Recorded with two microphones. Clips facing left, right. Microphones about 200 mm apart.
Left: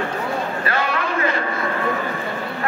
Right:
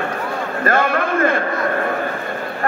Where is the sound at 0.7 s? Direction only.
50° right (ahead or behind).